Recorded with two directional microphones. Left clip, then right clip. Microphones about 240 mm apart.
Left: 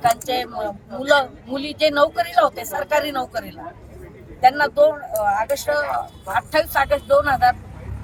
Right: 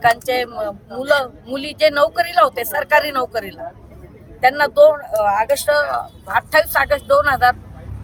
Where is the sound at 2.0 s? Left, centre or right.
Right.